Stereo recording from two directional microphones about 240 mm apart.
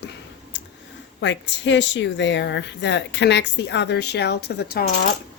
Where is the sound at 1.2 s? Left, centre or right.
Left.